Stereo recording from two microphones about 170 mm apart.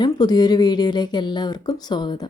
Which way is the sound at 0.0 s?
25° left (ahead or behind).